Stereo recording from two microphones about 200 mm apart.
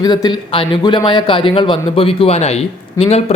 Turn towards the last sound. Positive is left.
turn(degrees=30)  # may be behind; listen again after turning